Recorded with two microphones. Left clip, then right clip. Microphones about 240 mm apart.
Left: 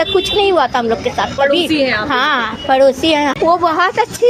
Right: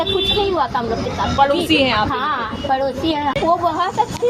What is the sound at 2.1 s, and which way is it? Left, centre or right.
A woman's voice, left.